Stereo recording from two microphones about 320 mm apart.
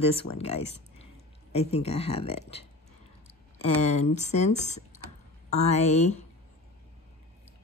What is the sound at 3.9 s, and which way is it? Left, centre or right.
Speech, left.